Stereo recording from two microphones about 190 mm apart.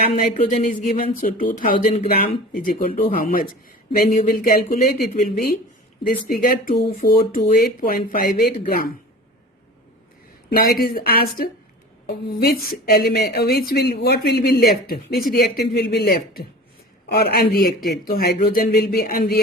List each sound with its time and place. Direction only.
0.2 s speech: 40° left (ahead or behind)
10.5 s a woman's voice: 50° left (ahead or behind)